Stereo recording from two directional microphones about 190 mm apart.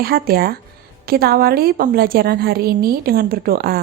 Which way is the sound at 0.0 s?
50° right (ahead or behind).